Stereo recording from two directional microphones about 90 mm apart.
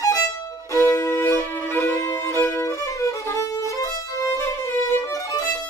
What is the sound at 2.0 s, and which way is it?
Violin, 30° left (ahead or behind).